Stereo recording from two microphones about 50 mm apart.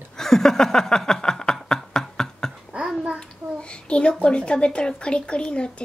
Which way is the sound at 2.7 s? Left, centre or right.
Centre.